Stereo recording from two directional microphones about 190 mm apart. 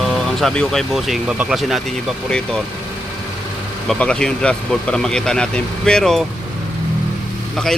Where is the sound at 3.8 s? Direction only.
5° left (ahead or behind).